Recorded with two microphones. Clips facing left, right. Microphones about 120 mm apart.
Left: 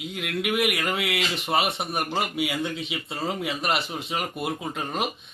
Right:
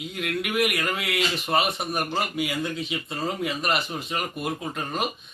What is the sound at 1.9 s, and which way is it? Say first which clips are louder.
Speech: even; 15° left (ahead or behind).